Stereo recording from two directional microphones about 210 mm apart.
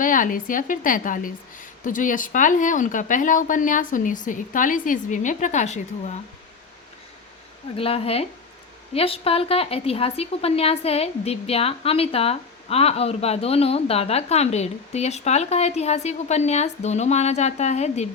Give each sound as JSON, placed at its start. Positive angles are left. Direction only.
{"t": 0.0, "sound": "a woman's voice", "side_deg": 40}
{"t": 7.8, "sound": "a woman's voice", "side_deg": 30}